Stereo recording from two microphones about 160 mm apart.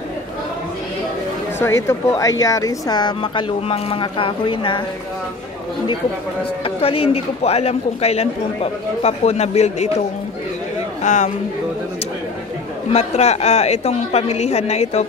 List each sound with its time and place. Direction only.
1.6 s speech: 15° left (ahead or behind); by 4.8 s 30° left (ahead or behind)
6.6 s a man's voice: 35° left (ahead or behind)
11.0 s a man's voice: 50° left (ahead or behind)
12.9 s a woman's voice: 45° left (ahead or behind)